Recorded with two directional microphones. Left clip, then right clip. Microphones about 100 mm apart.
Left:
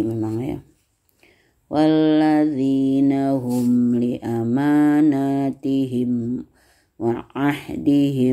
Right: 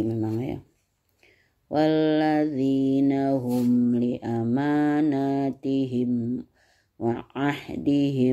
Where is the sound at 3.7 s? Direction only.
10° right (ahead or behind).